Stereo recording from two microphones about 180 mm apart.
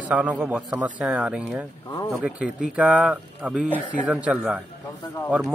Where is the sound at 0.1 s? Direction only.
5° right (ahead or behind).